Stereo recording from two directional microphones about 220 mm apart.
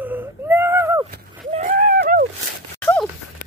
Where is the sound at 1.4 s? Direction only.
35° right (ahead or behind).